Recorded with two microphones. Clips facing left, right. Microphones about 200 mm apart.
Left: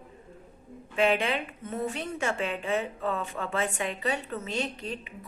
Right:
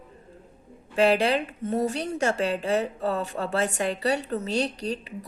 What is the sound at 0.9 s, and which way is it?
A woman's voice, 40° right (ahead or behind).